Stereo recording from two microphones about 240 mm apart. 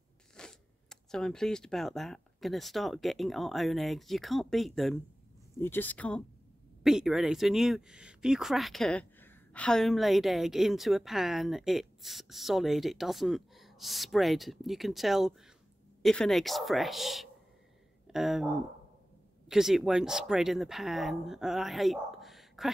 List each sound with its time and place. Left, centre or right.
0.4 s speech: centre